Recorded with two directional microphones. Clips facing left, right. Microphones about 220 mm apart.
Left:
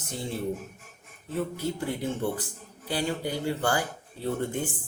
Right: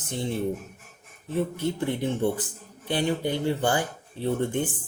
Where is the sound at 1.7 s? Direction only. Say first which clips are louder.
Right 4 dB; 20° right (ahead or behind).